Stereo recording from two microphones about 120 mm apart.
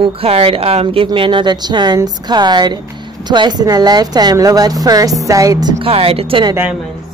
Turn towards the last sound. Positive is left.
turn(degrees=-50)  # may be behind; listen again after turning